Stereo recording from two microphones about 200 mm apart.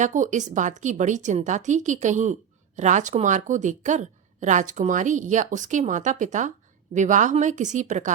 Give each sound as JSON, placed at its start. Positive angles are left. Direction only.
{"t": 0.0, "sound": "a woman's voice", "side_deg": -40}